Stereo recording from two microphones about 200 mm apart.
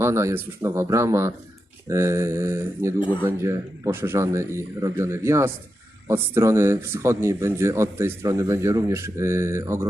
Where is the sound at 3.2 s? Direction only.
15° right (ahead or behind).